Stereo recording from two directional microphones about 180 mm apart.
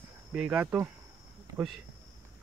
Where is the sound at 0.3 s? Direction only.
5° right (ahead or behind).